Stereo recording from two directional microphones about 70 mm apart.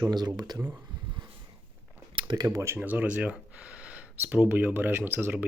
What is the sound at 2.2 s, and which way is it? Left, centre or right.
Speech, right.